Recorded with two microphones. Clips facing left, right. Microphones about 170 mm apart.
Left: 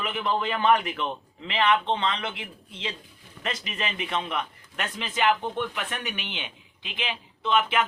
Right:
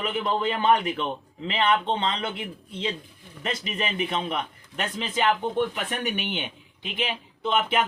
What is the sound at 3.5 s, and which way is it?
Speech, 35° right (ahead or behind).